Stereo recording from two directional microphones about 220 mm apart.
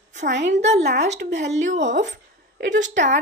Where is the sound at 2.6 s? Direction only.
55° right (ahead or behind).